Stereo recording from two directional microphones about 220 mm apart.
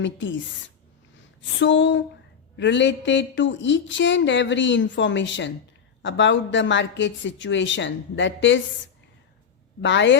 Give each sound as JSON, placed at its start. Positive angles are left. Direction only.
{"t": 0.0, "sound": "a woman's voice", "side_deg": 55}
{"t": 1.4, "sound": "a woman's voice", "side_deg": 55}
{"t": 9.8, "sound": "a woman's voice", "side_deg": 55}